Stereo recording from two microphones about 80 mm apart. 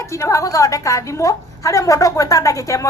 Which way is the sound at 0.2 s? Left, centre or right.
Left.